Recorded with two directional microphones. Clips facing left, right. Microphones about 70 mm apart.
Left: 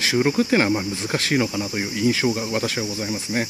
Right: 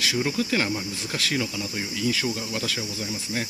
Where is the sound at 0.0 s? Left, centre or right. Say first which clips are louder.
Left 6 dB; left.